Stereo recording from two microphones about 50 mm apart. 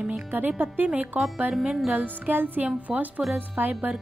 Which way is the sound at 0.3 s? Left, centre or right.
Right.